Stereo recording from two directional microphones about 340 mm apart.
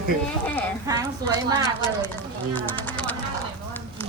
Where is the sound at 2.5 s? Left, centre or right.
Centre.